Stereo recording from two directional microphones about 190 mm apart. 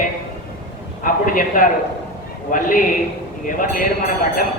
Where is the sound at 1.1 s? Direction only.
45° left (ahead or behind).